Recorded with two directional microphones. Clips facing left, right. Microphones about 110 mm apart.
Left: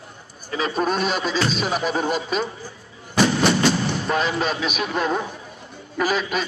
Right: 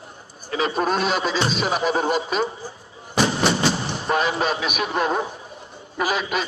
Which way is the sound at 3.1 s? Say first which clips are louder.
Left 2 dB; 25° right (ahead or behind).